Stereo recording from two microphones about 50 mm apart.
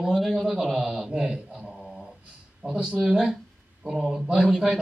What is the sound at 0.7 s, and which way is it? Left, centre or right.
Speech, centre.